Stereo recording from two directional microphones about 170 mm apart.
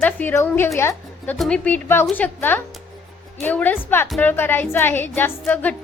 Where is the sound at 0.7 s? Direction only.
15° left (ahead or behind).